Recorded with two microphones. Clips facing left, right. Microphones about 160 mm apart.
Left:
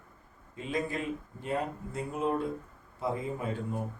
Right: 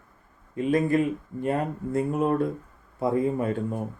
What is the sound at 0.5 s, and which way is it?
Speech, 55° right (ahead or behind).